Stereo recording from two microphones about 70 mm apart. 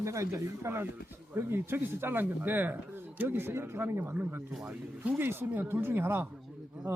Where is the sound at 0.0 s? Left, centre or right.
Right; by 5.1 s centre.